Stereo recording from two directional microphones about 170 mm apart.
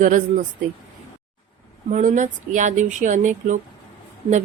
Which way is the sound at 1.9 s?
45° right (ahead or behind).